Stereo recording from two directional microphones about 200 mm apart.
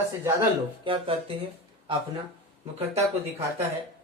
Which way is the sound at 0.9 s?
25° right (ahead or behind).